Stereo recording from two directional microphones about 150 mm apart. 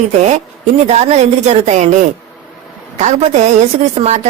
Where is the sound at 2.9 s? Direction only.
50° right (ahead or behind).